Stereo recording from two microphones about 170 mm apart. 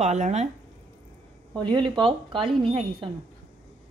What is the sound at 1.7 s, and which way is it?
A woman's voice, 30° right (ahead or behind).